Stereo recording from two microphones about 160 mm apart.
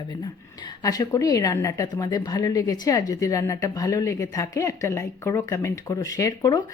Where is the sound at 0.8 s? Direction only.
25° left (ahead or behind).